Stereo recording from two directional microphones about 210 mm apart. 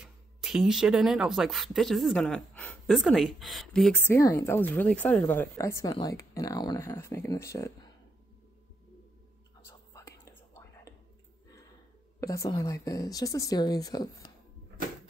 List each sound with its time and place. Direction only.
0.0 s speech: centre (ahead or behind); by 7.7 s 15° left (ahead or behind)
9.7 s whispering: 15° left (ahead or behind)
12.2 s speech: 15° left (ahead or behind)